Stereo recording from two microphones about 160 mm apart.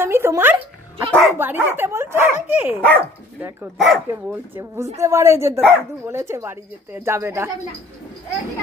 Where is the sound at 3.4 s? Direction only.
15° right (ahead or behind).